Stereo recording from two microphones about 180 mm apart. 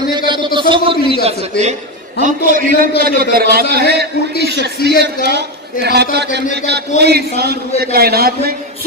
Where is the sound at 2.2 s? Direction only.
50° right (ahead or behind).